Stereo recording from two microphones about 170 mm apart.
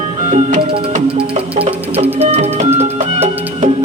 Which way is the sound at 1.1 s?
35° right (ahead or behind).